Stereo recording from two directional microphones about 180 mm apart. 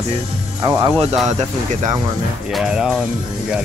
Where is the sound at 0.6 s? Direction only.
20° right (ahead or behind).